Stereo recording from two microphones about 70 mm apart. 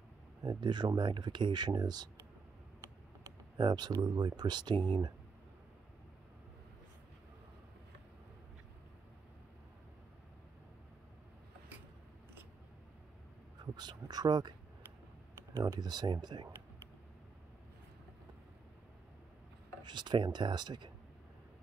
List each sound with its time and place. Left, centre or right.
0.4 s speech: right
3.5 s speech: right
13.7 s speech: right
15.8 s speech: right
19.8 s speech: right